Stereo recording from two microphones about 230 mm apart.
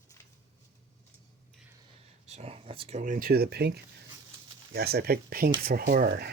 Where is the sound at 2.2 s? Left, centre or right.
Right.